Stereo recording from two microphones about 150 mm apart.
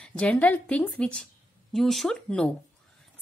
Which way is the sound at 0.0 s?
5° left (ahead or behind).